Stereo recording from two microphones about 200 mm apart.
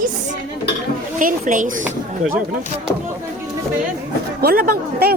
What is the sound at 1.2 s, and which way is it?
Speech, 40° right (ahead or behind).